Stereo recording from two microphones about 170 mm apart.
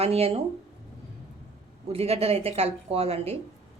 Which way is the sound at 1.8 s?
35° right (ahead or behind).